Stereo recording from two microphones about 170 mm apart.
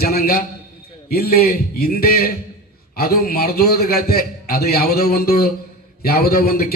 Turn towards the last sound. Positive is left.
turn(degrees=65)  # may be behind; listen again after turning